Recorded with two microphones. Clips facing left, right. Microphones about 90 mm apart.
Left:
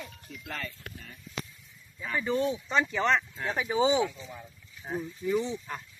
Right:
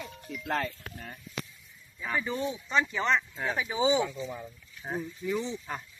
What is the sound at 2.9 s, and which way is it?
Speech, 45° left (ahead or behind).